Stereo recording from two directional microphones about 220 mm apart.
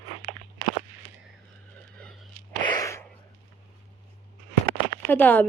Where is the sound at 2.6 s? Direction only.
20° left (ahead or behind).